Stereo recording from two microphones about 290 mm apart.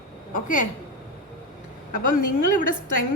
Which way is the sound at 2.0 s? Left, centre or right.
Left.